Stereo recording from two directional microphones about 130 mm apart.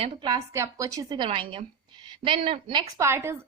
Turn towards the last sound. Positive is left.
turn(degrees=-20)  # may be behind; listen again after turning